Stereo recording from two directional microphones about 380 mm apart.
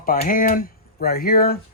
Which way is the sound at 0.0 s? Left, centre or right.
Left.